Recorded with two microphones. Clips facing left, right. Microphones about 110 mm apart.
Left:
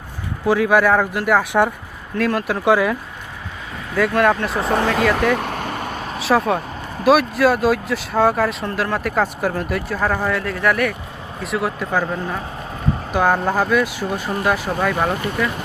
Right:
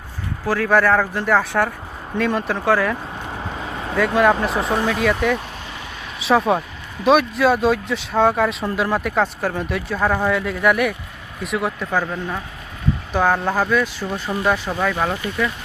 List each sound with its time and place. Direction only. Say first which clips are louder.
0.4 s speech: left 2 dB; 15° left (ahead or behind)
2.1 s speech: left 1 dB; centre (ahead or behind)
2.6 s speech: left 3 dB; 10° left (ahead or behind)
3.9 s speech: even; centre (ahead or behind)
4.8 s speech: left 2 dB; 90° left
5.3 s vehicle: left 3 dB; 65° left (ahead or behind)
6.2 s speech: right 1 dB; centre (ahead or behind)